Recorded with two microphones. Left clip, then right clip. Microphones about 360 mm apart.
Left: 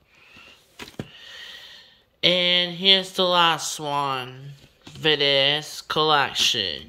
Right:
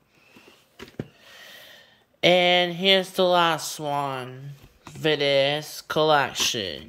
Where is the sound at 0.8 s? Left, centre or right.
Left.